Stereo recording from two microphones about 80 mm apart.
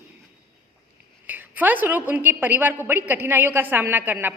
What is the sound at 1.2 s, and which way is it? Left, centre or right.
A woman's voice, right.